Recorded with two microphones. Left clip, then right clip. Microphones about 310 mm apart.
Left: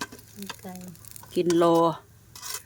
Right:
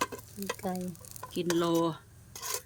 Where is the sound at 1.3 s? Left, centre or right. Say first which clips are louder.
Left 8 dB; centre.